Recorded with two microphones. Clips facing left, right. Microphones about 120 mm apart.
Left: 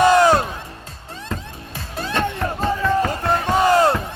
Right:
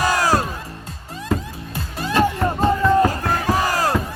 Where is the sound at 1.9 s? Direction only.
5° right (ahead or behind).